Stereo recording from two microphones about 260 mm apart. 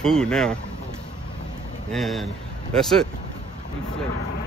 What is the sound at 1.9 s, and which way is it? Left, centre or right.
Speech, centre.